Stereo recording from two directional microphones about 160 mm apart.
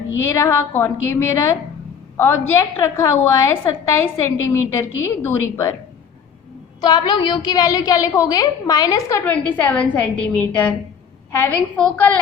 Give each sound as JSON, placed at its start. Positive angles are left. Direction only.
{"t": 0.2, "sound": "a woman's voice", "side_deg": 15}
{"t": 6.8, "sound": "a woman's voice", "side_deg": 25}
{"t": 9.2, "sound": "a woman's voice", "side_deg": 10}